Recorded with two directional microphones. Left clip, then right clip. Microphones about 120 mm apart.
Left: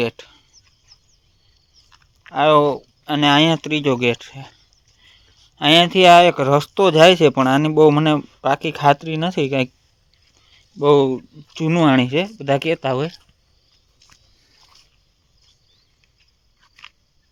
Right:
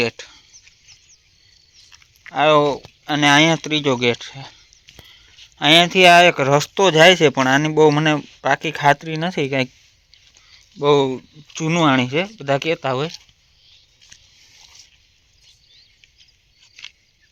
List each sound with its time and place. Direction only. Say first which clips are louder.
0.0 s speech: right 1 dB; 20° left (ahead or behind)
2.2 s speech: left 1 dB; 25° left (ahead or behind)
5.5 s speech: right 1 dB; 30° left (ahead or behind)
10.3 s a sound: left 2 dB; 35° left (ahead or behind)
11.5 s speech: left 1 dB; 50° left (ahead or behind)